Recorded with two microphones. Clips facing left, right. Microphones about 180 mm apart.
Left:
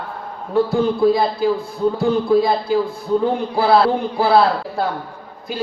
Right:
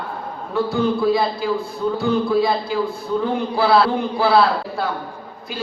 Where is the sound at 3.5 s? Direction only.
45° left (ahead or behind).